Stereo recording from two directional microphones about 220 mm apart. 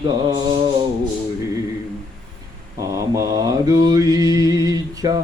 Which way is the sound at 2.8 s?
15° right (ahead or behind).